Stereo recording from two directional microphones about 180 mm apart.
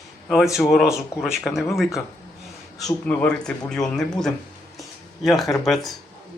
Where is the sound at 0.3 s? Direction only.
Centre (ahead or behind).